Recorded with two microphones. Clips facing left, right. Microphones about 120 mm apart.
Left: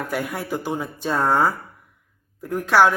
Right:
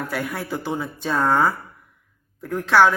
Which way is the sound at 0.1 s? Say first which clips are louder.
Left 1 dB; 15° left (ahead or behind).